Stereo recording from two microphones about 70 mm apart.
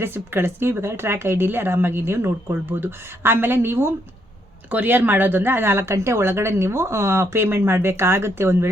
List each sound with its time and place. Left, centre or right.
0.0 s speech: right